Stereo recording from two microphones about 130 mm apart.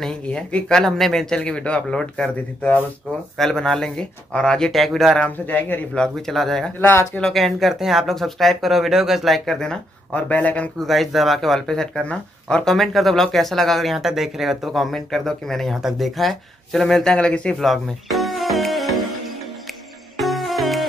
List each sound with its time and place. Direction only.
0.0 s speech: 10° left (ahead or behind)
6.8 s speech: 15° left (ahead or behind)
7.2 s speech: centre (ahead or behind)
10.9 s speech: centre (ahead or behind)
20.2 s music: centre (ahead or behind)